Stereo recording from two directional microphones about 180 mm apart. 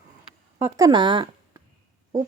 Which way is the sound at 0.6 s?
15° right (ahead or behind).